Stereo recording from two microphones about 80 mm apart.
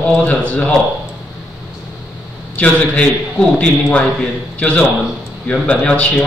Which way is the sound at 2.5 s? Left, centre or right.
Centre.